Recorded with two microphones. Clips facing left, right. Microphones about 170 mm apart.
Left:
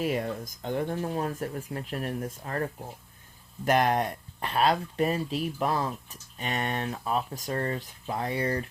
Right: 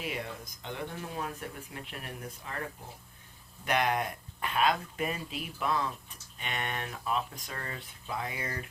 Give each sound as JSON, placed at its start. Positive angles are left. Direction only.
{"t": 0.0, "sound": "speech", "side_deg": 45}
{"t": 3.7, "sound": "speech", "side_deg": 40}